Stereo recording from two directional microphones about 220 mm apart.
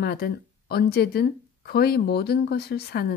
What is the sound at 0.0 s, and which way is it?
Speech, 45° left (ahead or behind).